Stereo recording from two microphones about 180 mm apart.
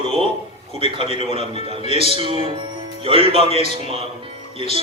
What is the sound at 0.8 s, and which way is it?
Speech, 30° right (ahead or behind).